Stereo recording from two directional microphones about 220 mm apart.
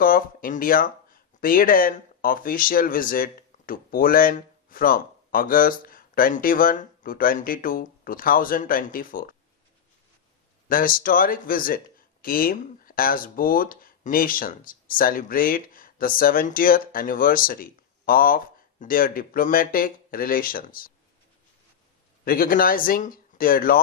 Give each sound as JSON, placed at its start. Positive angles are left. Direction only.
{"t": 0.0, "sound": "speech", "side_deg": 40}
{"t": 10.7, "sound": "speech", "side_deg": 40}
{"t": 22.2, "sound": "speech", "side_deg": 40}